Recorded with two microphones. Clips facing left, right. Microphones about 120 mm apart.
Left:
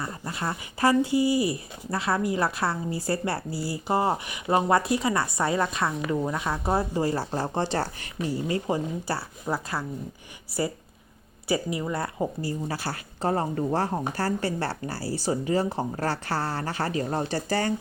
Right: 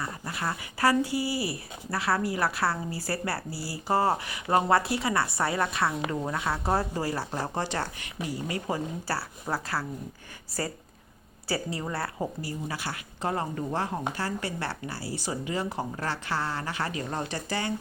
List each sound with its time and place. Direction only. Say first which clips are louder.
0.0 s speech: left 1 dB; 25° left (ahead or behind)
7.3 s speech: left 4 dB; 25° left (ahead or behind)
11.4 s speech: left 4 dB; 15° left (ahead or behind)
12.4 s speech: left 4 dB; 30° left (ahead or behind)